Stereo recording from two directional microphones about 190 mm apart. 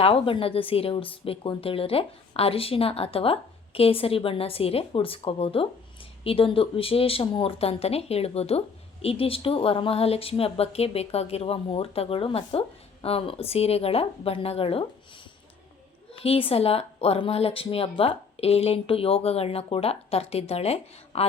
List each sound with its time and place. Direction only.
0.0 s speech: 30° left (ahead or behind)
16.2 s speech: 30° left (ahead or behind)